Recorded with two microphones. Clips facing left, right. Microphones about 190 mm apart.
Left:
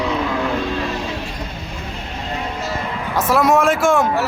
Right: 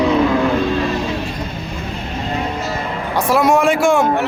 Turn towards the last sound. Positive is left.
turn(degrees=0)  # may be behind; listen again after turning